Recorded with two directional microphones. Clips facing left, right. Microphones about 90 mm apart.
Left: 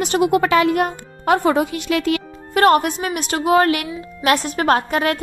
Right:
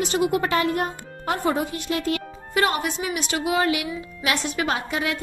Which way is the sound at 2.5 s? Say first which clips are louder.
Left 8 dB; 50° left (ahead or behind).